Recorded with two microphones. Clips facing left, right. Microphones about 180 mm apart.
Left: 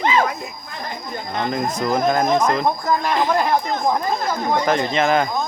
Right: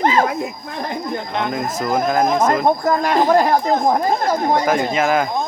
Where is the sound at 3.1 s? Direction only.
40° right (ahead or behind).